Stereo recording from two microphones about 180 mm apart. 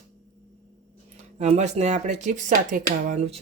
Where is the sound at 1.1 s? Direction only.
40° right (ahead or behind).